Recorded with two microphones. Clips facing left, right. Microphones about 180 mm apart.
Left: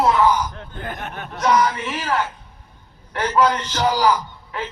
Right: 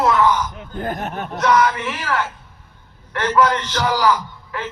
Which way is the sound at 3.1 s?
30° left (ahead or behind).